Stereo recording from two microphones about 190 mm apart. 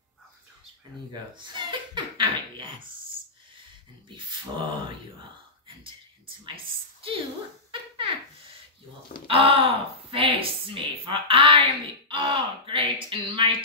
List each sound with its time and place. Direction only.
1.3 s speech: 25° right (ahead or behind)
4.6 s a woman's voice: 25° right (ahead or behind)
6.2 s a woman's voice: 30° right (ahead or behind)
9.3 s a woman's voice: 30° right (ahead or behind)